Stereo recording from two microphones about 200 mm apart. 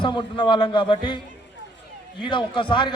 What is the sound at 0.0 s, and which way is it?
A man's voice, 25° left (ahead or behind).